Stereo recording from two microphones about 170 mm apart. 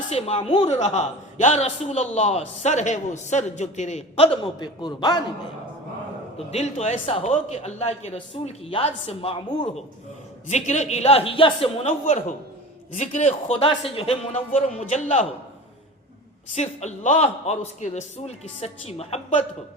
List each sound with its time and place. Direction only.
0.1 s a man's voice: 35° left (ahead or behind)
4.6 s a man's voice: 25° left (ahead or behind)
6.3 s a man's voice: 40° left (ahead or behind)
10.5 s a man's voice: 45° left (ahead or behind)
16.6 s a man's voice: 45° left (ahead or behind)